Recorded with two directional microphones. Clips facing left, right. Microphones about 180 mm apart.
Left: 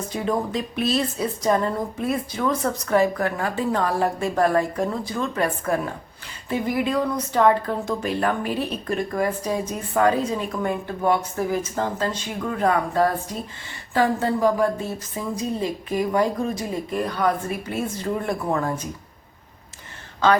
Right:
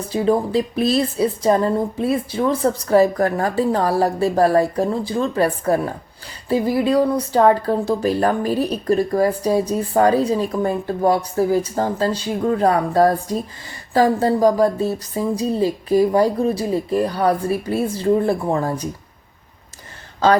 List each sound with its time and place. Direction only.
0.1 s speech: 30° right (ahead or behind)